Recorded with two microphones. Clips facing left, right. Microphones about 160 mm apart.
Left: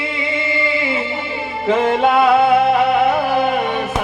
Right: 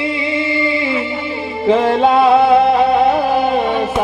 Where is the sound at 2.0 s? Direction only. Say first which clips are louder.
Right 2 dB; 25° right (ahead or behind).